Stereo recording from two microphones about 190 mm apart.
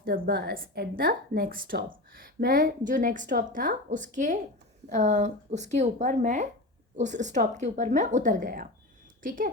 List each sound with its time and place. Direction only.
0.0 s a woman's voice: 55° right (ahead or behind)